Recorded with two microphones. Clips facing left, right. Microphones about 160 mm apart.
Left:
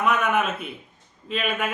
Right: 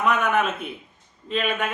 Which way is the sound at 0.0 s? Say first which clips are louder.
Right 1 dB; 5° left (ahead or behind).